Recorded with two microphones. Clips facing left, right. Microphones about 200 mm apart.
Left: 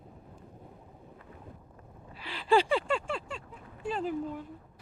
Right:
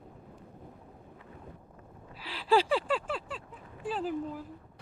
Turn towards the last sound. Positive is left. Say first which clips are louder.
# left 1 dB
turn(degrees=-5)  # may be behind; listen again after turning